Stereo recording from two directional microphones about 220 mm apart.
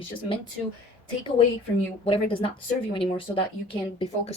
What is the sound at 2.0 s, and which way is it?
A woman's voice, 25° left (ahead or behind).